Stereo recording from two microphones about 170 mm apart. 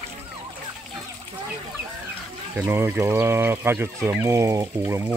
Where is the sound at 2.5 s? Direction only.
15° right (ahead or behind).